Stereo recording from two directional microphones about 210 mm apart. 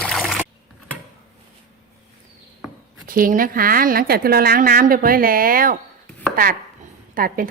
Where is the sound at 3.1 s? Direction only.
40° right (ahead or behind).